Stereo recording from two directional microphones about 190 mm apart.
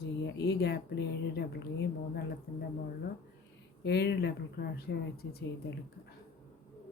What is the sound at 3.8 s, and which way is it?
Speech, 65° left (ahead or behind).